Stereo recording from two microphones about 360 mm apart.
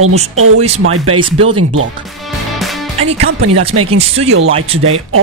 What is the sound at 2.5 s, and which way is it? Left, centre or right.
Music, centre.